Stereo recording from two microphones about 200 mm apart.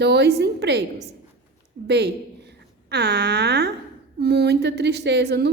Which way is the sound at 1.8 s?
55° right (ahead or behind).